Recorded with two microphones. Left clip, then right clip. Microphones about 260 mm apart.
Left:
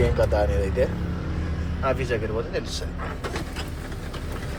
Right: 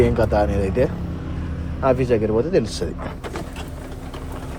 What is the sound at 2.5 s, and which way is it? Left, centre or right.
Speech, right.